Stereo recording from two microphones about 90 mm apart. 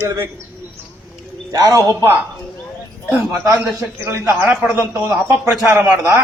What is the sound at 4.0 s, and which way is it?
Speech, 30° right (ahead or behind).